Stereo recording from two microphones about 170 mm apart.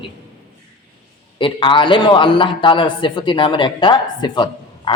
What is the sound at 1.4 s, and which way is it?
A man's voice, 30° left (ahead or behind).